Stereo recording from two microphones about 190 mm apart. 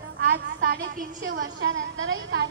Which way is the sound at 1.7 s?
90° right.